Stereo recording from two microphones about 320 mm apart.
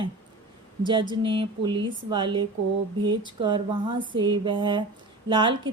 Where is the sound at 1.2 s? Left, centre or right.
Centre.